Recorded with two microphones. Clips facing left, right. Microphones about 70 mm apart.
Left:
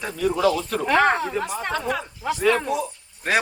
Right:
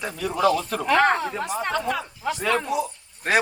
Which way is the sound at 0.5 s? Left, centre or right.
Centre.